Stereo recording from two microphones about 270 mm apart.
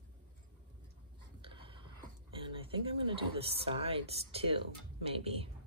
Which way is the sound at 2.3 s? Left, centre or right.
Centre.